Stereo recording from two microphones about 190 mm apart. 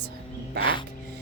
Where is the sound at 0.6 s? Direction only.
25° left (ahead or behind).